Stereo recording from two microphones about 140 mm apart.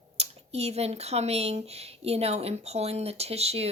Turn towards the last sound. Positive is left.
turn(degrees=-45)  # may be behind; listen again after turning